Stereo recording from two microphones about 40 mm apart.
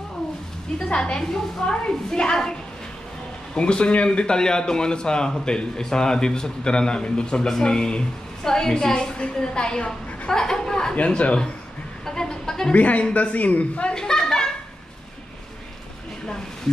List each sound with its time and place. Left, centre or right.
0.7 s a man's voice: left
3.5 s a man's voice: left
11.0 s a man's voice: left
12.1 s a sound: centre
12.7 s a man's voice: left
13.9 s a sound: centre